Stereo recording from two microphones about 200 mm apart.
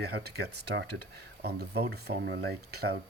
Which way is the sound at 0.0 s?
55° right (ahead or behind).